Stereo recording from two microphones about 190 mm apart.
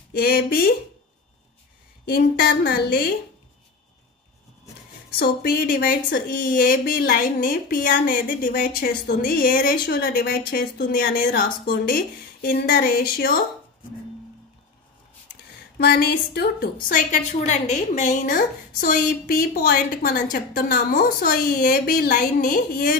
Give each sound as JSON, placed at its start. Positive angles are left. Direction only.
{"t": 0.1, "sound": "a woman's voice", "side_deg": 55}
{"t": 2.0, "sound": "a woman's voice", "side_deg": 60}
{"t": 5.2, "sound": "a woman's voice", "side_deg": 50}
{"t": 15.8, "sound": "a woman's voice", "side_deg": 55}